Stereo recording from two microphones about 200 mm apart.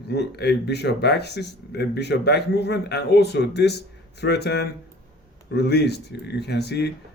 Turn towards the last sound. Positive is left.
turn(degrees=55)  # may be behind; listen again after turning